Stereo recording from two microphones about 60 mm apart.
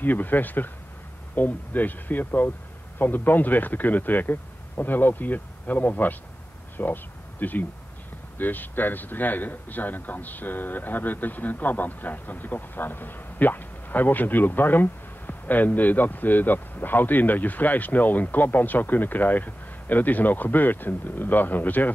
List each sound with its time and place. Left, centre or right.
0.0 s a man's voice: left